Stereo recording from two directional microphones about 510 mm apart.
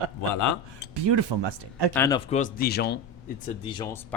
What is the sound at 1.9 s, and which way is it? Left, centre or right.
Speech, centre.